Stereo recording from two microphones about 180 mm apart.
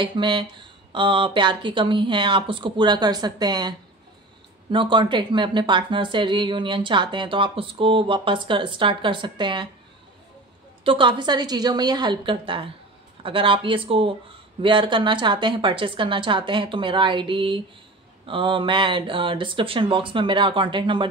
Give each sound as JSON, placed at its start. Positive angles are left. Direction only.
{"t": 0.0, "sound": "speech", "side_deg": -25}
{"t": 10.8, "sound": "speech", "side_deg": -30}